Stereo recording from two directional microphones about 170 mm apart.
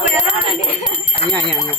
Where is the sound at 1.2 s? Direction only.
40° left (ahead or behind).